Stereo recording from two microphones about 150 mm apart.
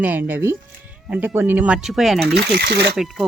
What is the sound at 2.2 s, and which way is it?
Speech, 90° right.